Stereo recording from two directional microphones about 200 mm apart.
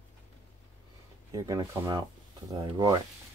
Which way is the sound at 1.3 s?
15° right (ahead or behind).